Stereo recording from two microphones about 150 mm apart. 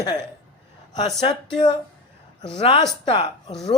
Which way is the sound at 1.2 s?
30° left (ahead or behind).